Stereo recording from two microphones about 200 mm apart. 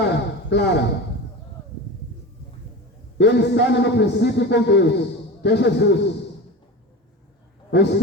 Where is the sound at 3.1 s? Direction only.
60° left (ahead or behind).